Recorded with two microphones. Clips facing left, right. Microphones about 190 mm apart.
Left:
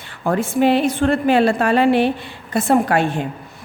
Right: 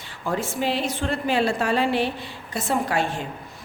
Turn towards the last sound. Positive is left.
turn(degrees=60)  # may be behind; listen again after turning